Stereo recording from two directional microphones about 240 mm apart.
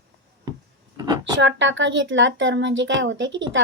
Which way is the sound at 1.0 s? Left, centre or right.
Centre.